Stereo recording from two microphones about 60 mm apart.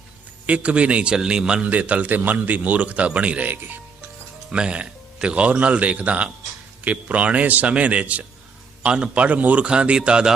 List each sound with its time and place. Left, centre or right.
0.4 s a man's voice: right
3.5 s speech: right
4.5 s a man's voice: centre